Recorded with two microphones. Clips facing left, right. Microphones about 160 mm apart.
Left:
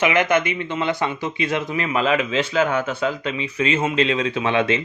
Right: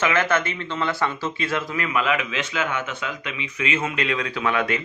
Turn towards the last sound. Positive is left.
turn(degrees=25)  # may be behind; listen again after turning